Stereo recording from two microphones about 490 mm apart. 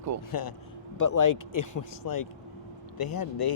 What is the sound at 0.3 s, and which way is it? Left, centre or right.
Speech, left.